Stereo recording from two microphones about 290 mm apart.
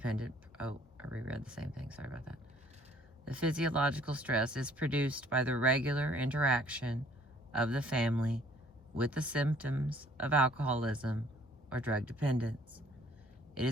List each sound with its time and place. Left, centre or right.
0.0 s speech: centre